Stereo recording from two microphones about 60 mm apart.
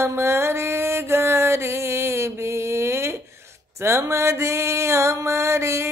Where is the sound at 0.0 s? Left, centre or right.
Right.